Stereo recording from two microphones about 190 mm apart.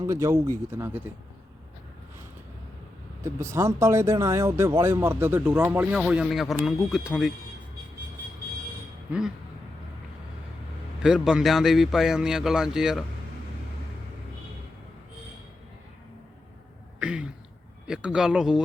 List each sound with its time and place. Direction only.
0.0 s speech: 15° right (ahead or behind)
3.2 s speech: 15° right (ahead or behind)
11.0 s speech: 5° right (ahead or behind)
17.0 s throat clearing: 5° right (ahead or behind)
17.8 s speech: 5° right (ahead or behind)